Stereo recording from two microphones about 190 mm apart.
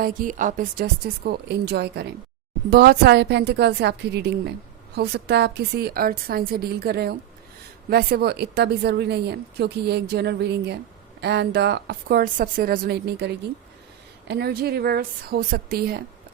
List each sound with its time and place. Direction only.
0.0 s a woman's voice: 45° right (ahead or behind)